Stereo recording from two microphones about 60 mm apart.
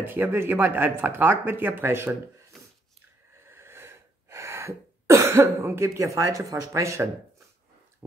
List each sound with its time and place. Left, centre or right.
0.0 s speech: right
3.4 s cough: right